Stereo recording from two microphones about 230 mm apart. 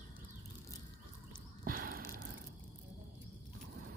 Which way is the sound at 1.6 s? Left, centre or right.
Right.